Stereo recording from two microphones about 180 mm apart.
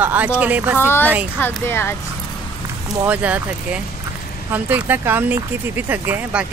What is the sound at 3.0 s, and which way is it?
Speech, 10° right (ahead or behind).